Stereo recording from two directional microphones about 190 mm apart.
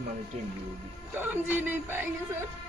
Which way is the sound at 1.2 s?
10° right (ahead or behind).